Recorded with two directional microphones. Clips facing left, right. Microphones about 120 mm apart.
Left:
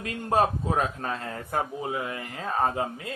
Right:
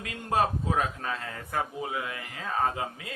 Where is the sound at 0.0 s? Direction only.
35° left (ahead or behind).